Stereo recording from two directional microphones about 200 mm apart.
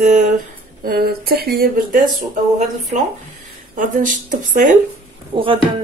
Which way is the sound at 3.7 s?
40° right (ahead or behind).